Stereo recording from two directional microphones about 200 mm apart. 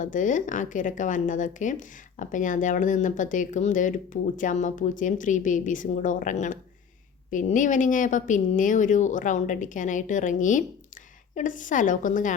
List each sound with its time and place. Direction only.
0.0 s speech: 40° left (ahead or behind)